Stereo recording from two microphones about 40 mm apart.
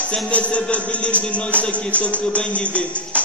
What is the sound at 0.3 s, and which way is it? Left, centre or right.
Music, left.